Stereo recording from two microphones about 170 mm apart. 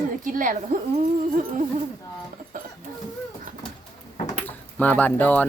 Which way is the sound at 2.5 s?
50° right (ahead or behind).